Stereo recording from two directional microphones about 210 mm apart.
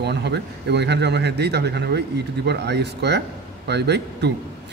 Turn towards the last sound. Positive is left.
turn(degrees=-55)  # may be behind; listen again after turning